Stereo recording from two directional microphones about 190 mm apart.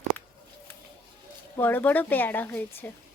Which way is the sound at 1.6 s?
10° left (ahead or behind).